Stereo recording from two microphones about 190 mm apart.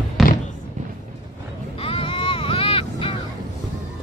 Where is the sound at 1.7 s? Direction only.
30° left (ahead or behind).